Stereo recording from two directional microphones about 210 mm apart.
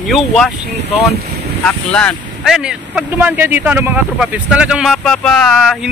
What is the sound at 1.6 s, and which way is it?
Speech, 5° left (ahead or behind).